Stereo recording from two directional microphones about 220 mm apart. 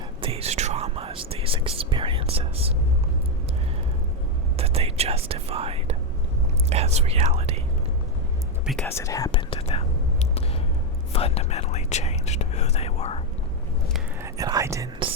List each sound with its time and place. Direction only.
0.2 s whispering: 25° right (ahead or behind)
4.5 s whispering: 25° right (ahead or behind)
8.6 s whispering: 5° left (ahead or behind); by 9.8 s 25° left (ahead or behind)
11.1 s whispering: 25° left (ahead or behind)
14.2 s whispering: 15° right (ahead or behind)